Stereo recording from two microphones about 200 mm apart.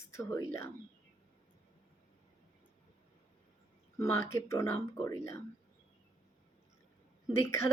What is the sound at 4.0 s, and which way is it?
Speech, 15° left (ahead or behind).